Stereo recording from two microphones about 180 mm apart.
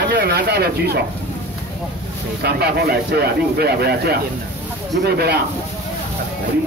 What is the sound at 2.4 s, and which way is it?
Speech, 60° right (ahead or behind).